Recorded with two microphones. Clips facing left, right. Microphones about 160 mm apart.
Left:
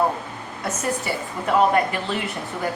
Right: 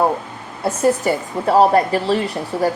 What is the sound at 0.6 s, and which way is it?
A woman's voice, 30° right (ahead or behind).